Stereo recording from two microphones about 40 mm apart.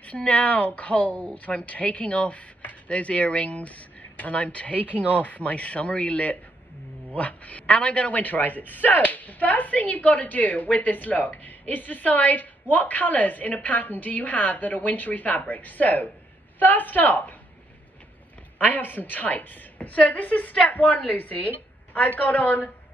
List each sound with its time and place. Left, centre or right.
0.0 s a woman's voice: left
18.6 s a woman's voice: left